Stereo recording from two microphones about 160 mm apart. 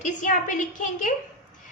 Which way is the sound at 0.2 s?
50° left (ahead or behind).